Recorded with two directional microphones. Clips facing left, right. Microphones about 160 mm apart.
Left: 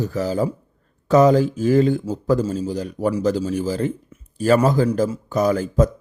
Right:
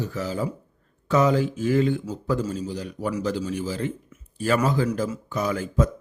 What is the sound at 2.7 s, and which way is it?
A man's voice, 45° left (ahead or behind).